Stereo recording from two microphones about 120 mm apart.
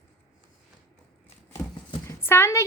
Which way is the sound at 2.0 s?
20° left (ahead or behind).